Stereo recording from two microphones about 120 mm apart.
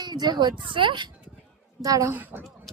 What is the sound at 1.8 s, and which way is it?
Speech, 30° right (ahead or behind).